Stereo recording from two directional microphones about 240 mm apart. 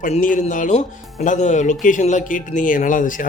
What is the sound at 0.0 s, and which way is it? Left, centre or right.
Speech, left.